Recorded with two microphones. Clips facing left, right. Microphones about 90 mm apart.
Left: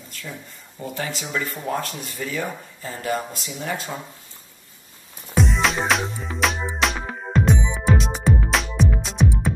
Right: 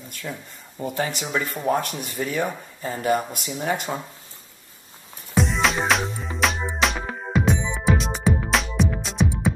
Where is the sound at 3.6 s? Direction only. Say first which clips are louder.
Right 3 dB; 20° right (ahead or behind).